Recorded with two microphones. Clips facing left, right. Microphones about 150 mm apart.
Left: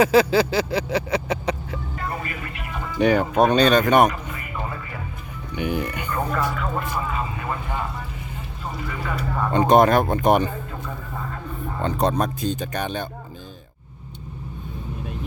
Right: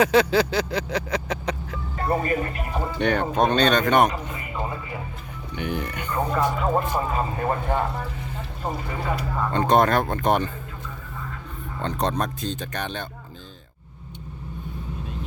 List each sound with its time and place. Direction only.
0.0 s vehicle: 5° left (ahead or behind)
2.0 s speech: 35° right (ahead or behind)
3.0 s speech: 5° left (ahead or behind)
4.1 s music: 25° right (ahead or behind)
5.5 s speech: 10° left (ahead or behind)
6.1 s speech: 15° right (ahead or behind)
6.6 s speech: 35° right (ahead or behind)
9.5 s speech: 15° left (ahead or behind)
11.8 s speech: 5° left (ahead or behind)